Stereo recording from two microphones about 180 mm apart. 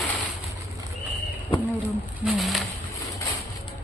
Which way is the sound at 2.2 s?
Centre (ahead or behind).